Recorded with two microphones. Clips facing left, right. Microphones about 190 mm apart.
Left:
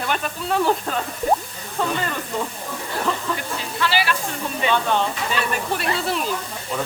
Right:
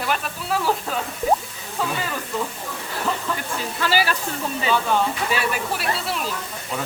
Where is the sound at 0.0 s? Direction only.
5° right (ahead or behind).